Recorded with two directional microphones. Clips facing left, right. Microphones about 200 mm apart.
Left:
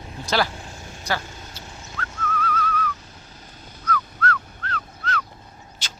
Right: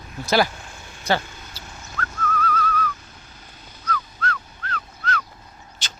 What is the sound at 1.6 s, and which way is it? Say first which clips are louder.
Dog: left 1 dB; 30° left (ahead or behind).